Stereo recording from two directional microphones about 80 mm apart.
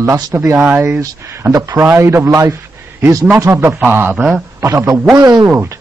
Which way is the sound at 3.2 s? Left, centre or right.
Right.